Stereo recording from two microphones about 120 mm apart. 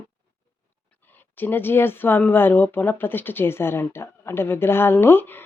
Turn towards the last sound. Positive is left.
turn(degrees=15)  # may be behind; listen again after turning